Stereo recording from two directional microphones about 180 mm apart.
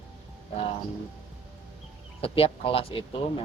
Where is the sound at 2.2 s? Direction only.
30° left (ahead or behind).